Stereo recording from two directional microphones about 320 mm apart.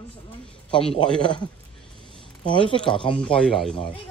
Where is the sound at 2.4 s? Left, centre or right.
Centre.